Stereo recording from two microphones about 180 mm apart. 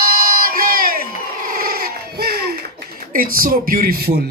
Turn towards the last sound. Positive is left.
turn(degrees=-50)  # may be behind; listen again after turning